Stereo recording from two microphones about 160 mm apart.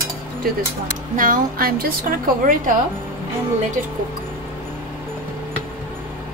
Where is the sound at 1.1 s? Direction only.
60° right (ahead or behind).